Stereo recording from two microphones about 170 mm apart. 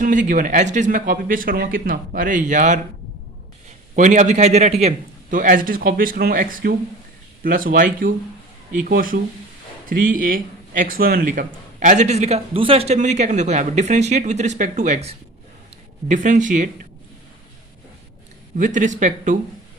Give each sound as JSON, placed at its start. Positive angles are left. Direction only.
{"t": 0.0, "sound": "speech", "side_deg": -50}
{"t": 3.9, "sound": "speech", "side_deg": -45}
{"t": 18.5, "sound": "speech", "side_deg": -50}